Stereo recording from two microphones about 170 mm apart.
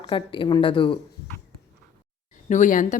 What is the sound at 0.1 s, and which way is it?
Speech, 30° left (ahead or behind).